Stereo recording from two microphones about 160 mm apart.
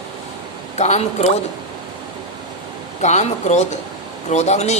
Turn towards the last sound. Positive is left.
turn(degrees=45)  # may be behind; listen again after turning